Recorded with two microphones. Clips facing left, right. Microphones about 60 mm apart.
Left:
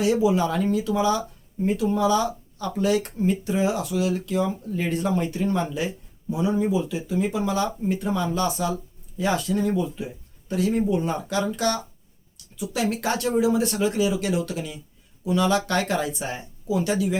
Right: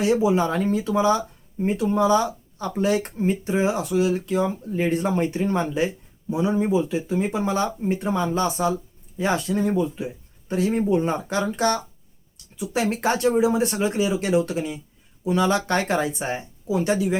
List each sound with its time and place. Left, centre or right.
0.0 s speech: right